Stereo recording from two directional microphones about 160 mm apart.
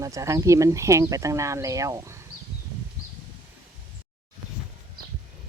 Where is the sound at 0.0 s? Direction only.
20° right (ahead or behind).